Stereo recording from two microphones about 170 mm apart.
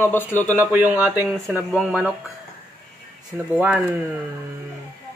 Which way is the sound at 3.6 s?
10° right (ahead or behind).